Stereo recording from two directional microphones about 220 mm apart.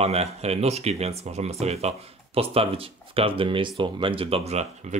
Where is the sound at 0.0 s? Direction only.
30° right (ahead or behind).